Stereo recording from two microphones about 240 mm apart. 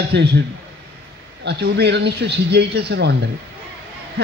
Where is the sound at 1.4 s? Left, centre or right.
Right.